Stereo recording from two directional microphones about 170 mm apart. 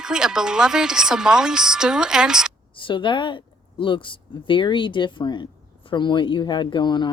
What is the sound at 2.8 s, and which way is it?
Speech, 30° left (ahead or behind).